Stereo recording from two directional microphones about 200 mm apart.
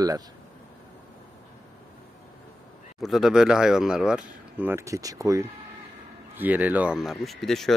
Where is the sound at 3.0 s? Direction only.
Centre (ahead or behind).